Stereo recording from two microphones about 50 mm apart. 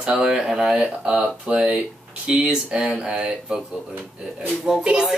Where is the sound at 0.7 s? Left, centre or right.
Centre.